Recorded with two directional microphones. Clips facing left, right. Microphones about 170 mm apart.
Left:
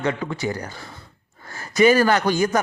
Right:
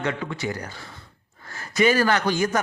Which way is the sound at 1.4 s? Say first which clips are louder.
Left 4 dB; 40° left (ahead or behind).